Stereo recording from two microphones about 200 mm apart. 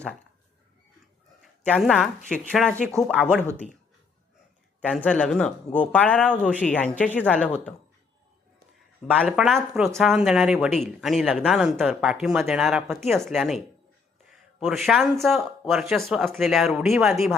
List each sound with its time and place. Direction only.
1.4 s speech: centre (ahead or behind)
4.8 s speech: 5° left (ahead or behind)
9.1 s speech: centre (ahead or behind)
14.8 s speech: centre (ahead or behind)